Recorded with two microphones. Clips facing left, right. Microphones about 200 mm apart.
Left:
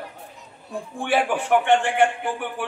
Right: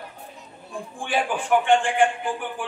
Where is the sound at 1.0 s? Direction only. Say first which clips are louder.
Left 3 dB; 65° left (ahead or behind).